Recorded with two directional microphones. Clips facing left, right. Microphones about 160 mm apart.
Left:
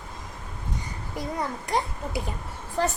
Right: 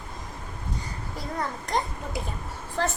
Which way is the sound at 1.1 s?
10° left (ahead or behind).